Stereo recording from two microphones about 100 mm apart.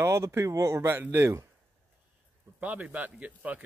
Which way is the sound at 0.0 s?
25° right (ahead or behind).